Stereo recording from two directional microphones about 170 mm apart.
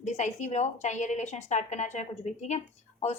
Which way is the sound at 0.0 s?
40° left (ahead or behind).